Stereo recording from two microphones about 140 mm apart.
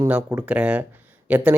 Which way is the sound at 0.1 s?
15° right (ahead or behind).